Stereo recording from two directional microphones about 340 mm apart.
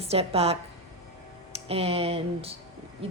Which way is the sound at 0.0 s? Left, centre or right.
Centre.